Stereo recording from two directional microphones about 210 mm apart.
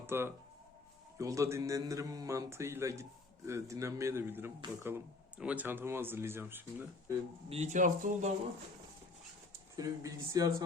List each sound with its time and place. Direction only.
0.0 s a man's voice: 10° right (ahead or behind)
7.5 s speech: 35° right (ahead or behind)
9.7 s a man's voice: 15° right (ahead or behind)